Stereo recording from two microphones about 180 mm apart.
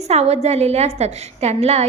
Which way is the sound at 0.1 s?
35° right (ahead or behind).